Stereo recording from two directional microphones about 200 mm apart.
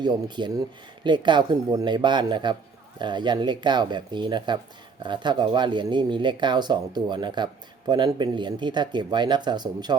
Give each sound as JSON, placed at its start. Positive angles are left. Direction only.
{"t": 0.0, "sound": "speech", "side_deg": -20}